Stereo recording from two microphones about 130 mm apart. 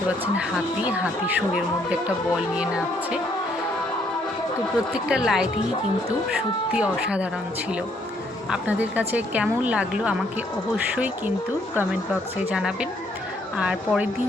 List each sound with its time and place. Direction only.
0.3 s a woman's voice: 10° right (ahead or behind)
5.0 s a woman's voice: 5° right (ahead or behind)
6.7 s a woman's voice: 10° right (ahead or behind)
8.4 s a woman's voice: 10° right (ahead or behind)
12.5 s a woman's voice: 5° right (ahead or behind)